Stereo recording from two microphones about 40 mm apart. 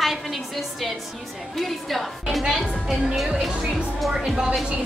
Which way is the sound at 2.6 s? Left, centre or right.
Centre.